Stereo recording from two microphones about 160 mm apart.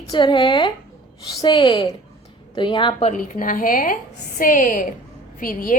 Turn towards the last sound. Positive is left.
turn(degrees=60)  # may be behind; listen again after turning